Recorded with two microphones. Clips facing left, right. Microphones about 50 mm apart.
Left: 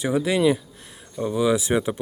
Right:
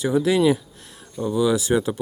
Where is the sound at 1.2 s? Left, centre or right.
Left.